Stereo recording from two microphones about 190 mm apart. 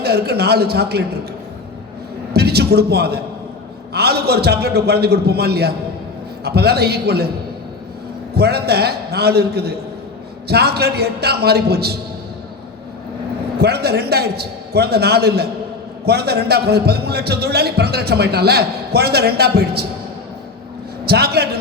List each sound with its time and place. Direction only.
0.0 s a man's voice: 55° right (ahead or behind)
2.3 s a man's voice: 55° right (ahead or behind)
8.4 s a man's voice: 55° right (ahead or behind)
13.6 s a man's voice: 55° right (ahead or behind)
21.0 s a man's voice: 55° right (ahead or behind)